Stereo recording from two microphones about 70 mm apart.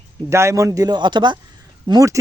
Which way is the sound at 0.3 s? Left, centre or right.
Right.